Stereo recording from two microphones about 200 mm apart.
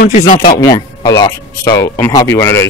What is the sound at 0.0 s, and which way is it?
Speech, 40° left (ahead or behind).